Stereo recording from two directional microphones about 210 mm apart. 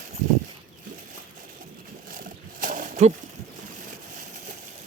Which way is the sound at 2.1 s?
40° right (ahead or behind).